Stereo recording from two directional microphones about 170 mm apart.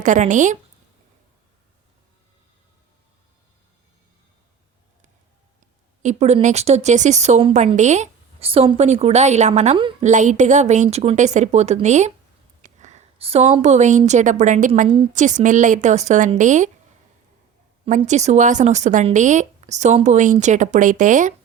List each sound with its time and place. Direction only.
0.0 s speech: 50° right (ahead or behind)
6.0 s a woman's voice: 40° right (ahead or behind)
10.0 s a woman's voice: 45° right (ahead or behind)
17.8 s speech: 45° right (ahead or behind)